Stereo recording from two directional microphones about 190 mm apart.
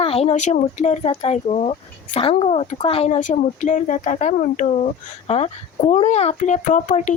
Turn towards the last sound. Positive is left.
turn(degrees=40)  # may be behind; listen again after turning